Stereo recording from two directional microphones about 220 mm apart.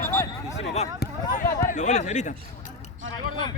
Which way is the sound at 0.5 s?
30° left (ahead or behind).